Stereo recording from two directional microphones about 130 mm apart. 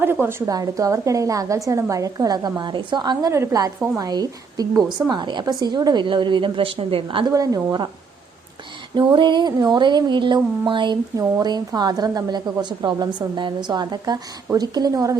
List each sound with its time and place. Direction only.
0.0 s a woman's voice: 15° right (ahead or behind); by 7.3 s 40° right (ahead or behind)
7.3 s a woman's voice: 25° right (ahead or behind)
9.0 s a woman's voice: 35° right (ahead or behind)